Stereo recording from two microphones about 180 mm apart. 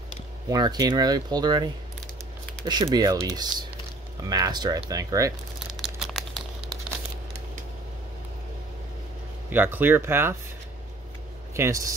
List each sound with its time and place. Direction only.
0.5 s speech: 20° right (ahead or behind)
5.7 s crumpling: centre (ahead or behind)
9.5 s speech: 10° right (ahead or behind)
11.5 s speech: 15° right (ahead or behind)